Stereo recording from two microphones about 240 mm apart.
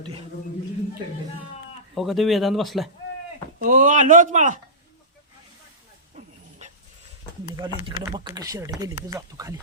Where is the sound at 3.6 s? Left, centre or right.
Right.